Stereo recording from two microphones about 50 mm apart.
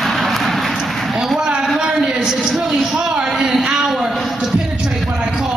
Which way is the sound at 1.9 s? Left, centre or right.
Centre.